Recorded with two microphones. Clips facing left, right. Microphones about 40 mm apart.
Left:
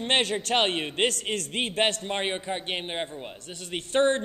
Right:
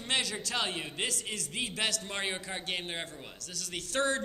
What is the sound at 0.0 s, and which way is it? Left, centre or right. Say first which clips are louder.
A man's voice: left 8 dB; left.